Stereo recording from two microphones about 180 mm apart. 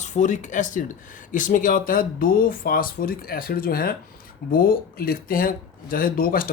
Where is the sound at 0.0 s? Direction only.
40° left (ahead or behind).